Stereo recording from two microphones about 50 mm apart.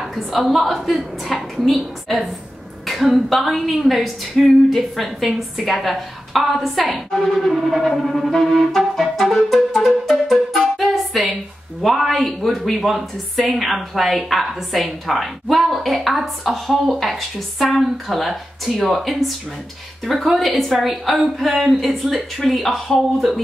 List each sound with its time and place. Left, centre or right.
0.0 s speech: centre
9.8 s music: centre
11.8 s speech: centre